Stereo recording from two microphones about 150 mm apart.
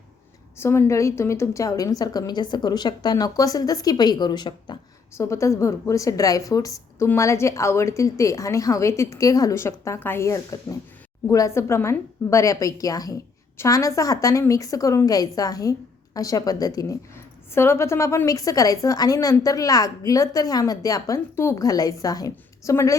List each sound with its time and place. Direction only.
0.6 s a woman's voice: 15° left (ahead or behind)
5.1 s a woman's voice: 20° left (ahead or behind)